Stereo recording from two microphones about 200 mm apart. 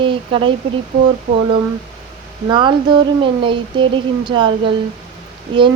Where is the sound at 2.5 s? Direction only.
20° right (ahead or behind).